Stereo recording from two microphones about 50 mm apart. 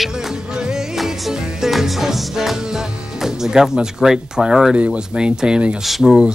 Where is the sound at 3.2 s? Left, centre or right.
Centre.